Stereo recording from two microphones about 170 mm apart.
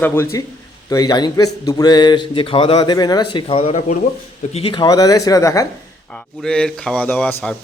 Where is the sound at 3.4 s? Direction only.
35° left (ahead or behind); by 5.6 s 20° left (ahead or behind).